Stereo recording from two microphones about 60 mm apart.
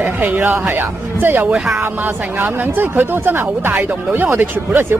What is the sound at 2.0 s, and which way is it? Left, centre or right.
Speech, right.